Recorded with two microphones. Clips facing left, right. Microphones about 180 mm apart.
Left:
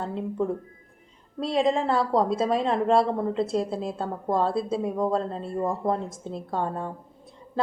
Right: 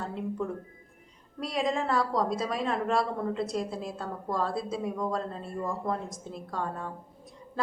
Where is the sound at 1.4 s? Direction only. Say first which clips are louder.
Left 6 dB; 25° left (ahead or behind).